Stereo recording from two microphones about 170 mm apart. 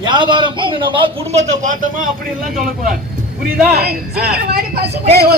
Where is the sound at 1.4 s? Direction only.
50° right (ahead or behind).